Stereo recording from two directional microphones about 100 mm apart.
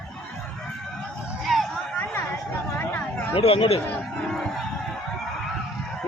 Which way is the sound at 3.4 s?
70° left (ahead or behind).